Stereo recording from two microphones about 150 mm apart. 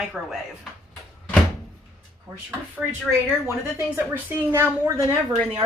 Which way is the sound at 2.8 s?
10° right (ahead or behind).